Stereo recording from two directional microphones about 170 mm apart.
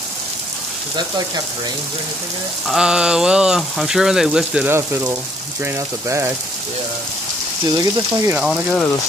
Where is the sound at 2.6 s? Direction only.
5° right (ahead or behind).